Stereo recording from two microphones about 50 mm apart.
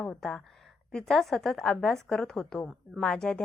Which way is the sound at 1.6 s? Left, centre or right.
Centre.